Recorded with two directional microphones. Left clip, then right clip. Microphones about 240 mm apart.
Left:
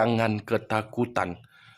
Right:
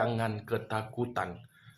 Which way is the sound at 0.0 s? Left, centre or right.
Left.